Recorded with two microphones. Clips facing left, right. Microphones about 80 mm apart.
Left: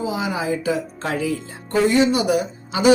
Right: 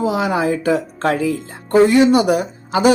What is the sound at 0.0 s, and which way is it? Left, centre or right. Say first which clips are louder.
A woman's voice: right 6 dB; right.